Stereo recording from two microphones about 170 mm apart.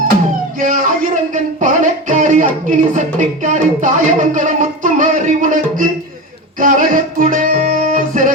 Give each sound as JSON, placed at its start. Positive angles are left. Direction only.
{"t": 0.6, "sound": "music", "side_deg": -50}
{"t": 2.6, "sound": "speech", "side_deg": -50}
{"t": 6.6, "sound": "music", "side_deg": -50}